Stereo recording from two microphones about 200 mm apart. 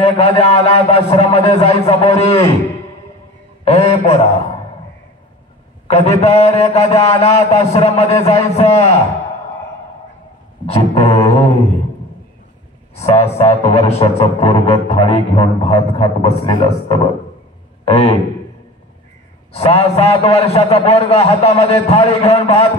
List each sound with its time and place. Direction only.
0.0 s a man's voice: 30° left (ahead or behind)
3.6 s a man's voice: 30° left (ahead or behind)
5.9 s a man's voice: 30° left (ahead or behind)
10.7 s speech: 30° left (ahead or behind)
12.9 s speech: 15° left (ahead or behind)
13.2 s a man's voice: 30° left (ahead or behind)
19.5 s a man's voice: 30° left (ahead or behind)